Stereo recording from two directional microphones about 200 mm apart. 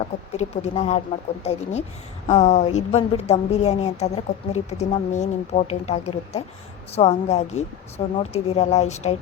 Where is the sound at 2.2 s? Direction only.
35° left (ahead or behind).